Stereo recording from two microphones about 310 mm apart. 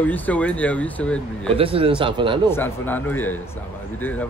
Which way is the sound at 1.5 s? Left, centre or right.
Centre.